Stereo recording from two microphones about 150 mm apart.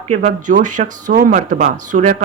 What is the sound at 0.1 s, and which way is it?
Speech, 50° right (ahead or behind).